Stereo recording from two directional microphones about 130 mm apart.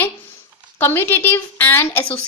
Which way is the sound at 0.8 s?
15° left (ahead or behind).